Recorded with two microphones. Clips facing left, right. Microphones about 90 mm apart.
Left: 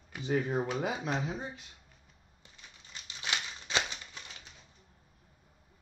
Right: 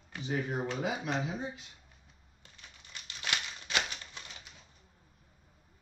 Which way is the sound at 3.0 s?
20° left (ahead or behind).